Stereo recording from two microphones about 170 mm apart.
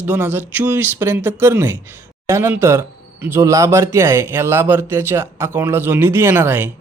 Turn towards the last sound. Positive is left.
turn(degrees=-10)  # may be behind; listen again after turning